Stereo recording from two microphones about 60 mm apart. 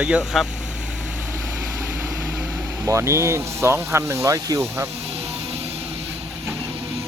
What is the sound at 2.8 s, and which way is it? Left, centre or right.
Speech, right.